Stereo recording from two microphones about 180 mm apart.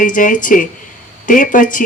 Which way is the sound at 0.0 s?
45° left (ahead or behind).